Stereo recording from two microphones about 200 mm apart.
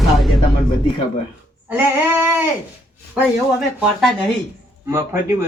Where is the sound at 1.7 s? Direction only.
10° right (ahead or behind).